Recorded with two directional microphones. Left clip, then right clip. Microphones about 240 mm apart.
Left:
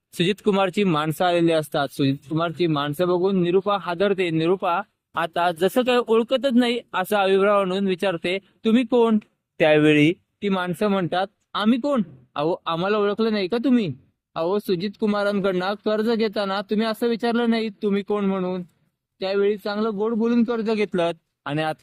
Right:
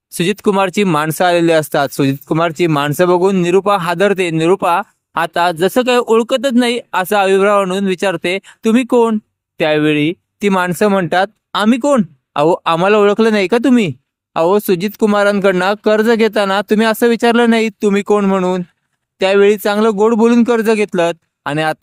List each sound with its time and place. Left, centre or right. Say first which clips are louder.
0.2 s speech: right 7 dB; right
10.4 s speech: right 10 dB; right